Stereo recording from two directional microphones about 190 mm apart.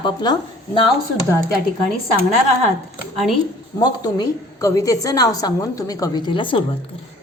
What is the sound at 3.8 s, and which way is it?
A woman's voice, 20° left (ahead or behind).